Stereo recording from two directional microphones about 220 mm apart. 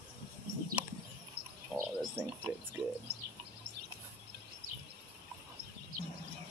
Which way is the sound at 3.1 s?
50° right (ahead or behind).